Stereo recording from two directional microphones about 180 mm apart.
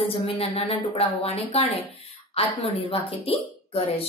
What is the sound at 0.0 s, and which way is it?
Speech, 30° left (ahead or behind).